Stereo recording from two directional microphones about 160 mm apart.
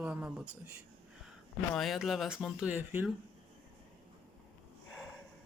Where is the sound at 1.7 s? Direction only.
Centre (ahead or behind).